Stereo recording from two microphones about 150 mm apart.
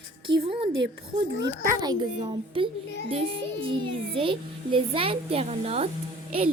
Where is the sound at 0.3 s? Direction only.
35° right (ahead or behind).